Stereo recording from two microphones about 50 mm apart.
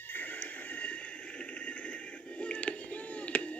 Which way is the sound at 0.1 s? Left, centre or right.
Left.